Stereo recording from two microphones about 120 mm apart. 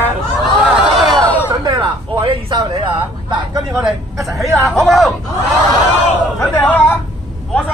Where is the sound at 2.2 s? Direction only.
40° right (ahead or behind).